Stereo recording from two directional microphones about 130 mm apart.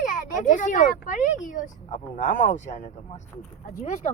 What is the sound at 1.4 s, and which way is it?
Speech, 80° left.